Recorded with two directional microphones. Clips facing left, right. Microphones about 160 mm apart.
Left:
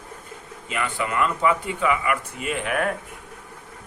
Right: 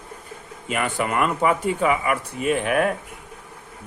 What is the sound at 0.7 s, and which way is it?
A man's voice, 50° right (ahead or behind).